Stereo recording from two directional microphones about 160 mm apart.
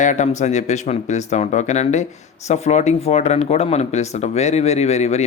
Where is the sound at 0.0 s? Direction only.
50° left (ahead or behind).